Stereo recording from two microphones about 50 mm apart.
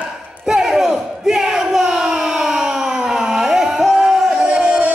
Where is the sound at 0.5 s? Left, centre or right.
Centre.